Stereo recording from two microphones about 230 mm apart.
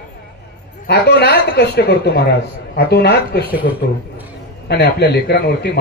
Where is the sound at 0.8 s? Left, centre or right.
Left.